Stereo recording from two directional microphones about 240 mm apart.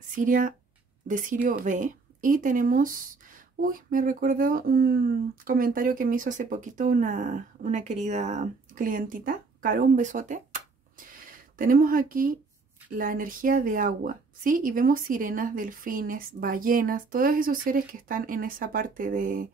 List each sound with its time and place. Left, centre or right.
0.1 s speech: right